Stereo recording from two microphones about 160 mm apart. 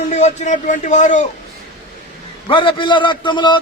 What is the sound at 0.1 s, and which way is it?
Speech, 45° left (ahead or behind).